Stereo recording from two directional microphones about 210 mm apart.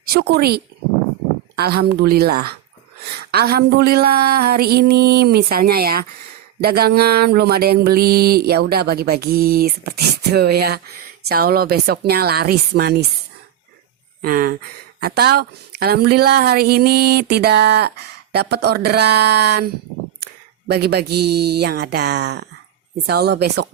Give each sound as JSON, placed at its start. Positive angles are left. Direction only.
{"t": 0.0, "sound": "speech", "side_deg": -50}
{"t": 1.5, "sound": "mantra", "side_deg": -50}
{"t": 14.2, "sound": "speech", "side_deg": -45}
{"t": 15.0, "sound": "mantra", "side_deg": -50}
{"t": 20.2, "sound": "speech", "side_deg": -50}
{"t": 23.0, "sound": "mantra", "side_deg": -50}